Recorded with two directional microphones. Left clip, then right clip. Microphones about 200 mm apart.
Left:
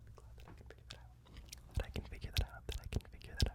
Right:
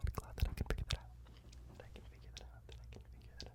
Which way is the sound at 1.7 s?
45° left (ahead or behind).